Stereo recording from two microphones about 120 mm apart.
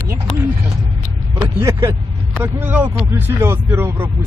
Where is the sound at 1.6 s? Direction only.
25° right (ahead or behind).